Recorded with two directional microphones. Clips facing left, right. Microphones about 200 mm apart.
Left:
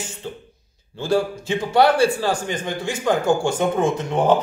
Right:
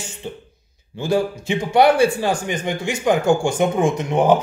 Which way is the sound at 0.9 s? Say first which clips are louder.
Right 1 dB; 15° right (ahead or behind).